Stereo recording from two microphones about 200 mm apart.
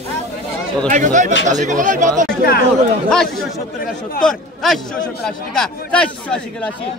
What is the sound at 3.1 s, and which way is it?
Speech, centre (ahead or behind).